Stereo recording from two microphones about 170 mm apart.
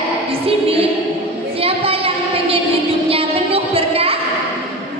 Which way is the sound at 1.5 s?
35° right (ahead or behind).